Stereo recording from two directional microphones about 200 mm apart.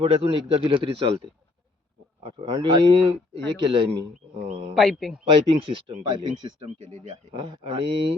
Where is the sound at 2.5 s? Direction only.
20° right (ahead or behind).